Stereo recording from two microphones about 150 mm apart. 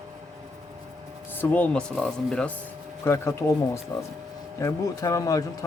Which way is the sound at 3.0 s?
15° left (ahead or behind).